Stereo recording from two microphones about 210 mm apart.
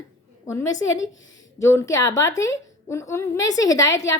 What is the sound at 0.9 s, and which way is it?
Speech, 60° left (ahead or behind).